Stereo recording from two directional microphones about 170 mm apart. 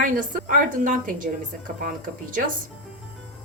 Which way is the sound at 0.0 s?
55° right (ahead or behind).